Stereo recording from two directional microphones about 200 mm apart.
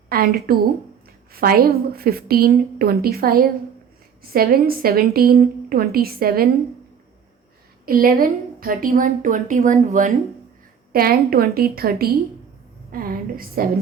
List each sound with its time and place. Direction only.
0.1 s a woman's voice: 50° right (ahead or behind)
7.9 s a woman's voice: 50° right (ahead or behind)